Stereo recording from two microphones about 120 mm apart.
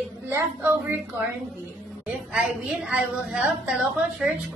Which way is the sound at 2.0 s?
10° right (ahead or behind).